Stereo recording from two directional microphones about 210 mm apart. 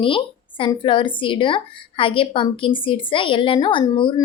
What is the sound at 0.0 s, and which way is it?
Speech, 25° left (ahead or behind).